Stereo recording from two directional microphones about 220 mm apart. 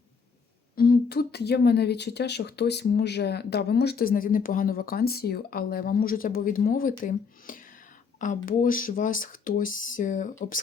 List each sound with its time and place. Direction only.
0.8 s speech: 45° left (ahead or behind)